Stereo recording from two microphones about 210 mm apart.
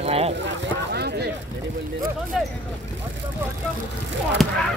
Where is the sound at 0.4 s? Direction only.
55° right (ahead or behind).